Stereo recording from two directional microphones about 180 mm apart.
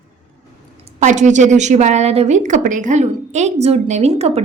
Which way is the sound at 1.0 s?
45° right (ahead or behind).